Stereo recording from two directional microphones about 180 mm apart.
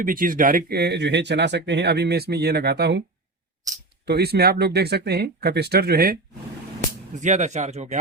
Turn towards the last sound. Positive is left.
turn(degrees=-40)  # may be behind; listen again after turning